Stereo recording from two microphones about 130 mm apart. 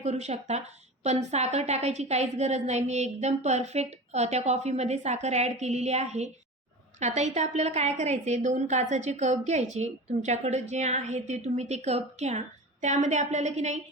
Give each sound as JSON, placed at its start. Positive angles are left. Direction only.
{"t": 0.0, "sound": "a woman's voice", "side_deg": -60}